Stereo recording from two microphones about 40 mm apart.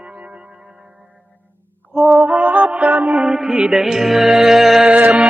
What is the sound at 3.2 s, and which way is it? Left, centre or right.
Music, centre.